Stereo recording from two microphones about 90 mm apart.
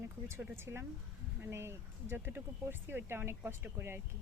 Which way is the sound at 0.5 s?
25° right (ahead or behind).